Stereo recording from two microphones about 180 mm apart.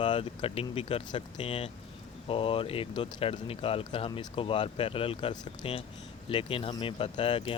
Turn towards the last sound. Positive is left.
turn(degrees=30)  # may be behind; listen again after turning